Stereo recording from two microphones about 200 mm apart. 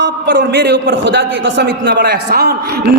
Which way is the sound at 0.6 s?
60° right (ahead or behind).